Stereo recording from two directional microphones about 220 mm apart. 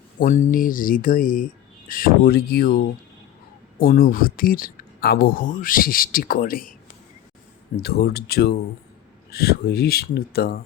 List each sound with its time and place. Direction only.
0.2 s speech: 35° left (ahead or behind)
7.8 s speech: 45° left (ahead or behind)